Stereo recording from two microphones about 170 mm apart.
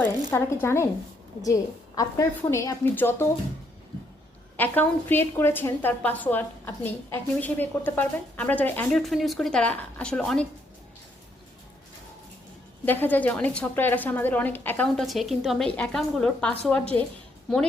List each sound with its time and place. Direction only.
0.0 s a woman's voice: 10° left (ahead or behind)
4.5 s a woman's voice: 10° left (ahead or behind)
12.8 s a woman's voice: 10° left (ahead or behind)
14.8 s a woman's voice: centre (ahead or behind)